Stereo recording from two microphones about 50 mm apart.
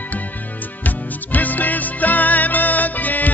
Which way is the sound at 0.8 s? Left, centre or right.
Left.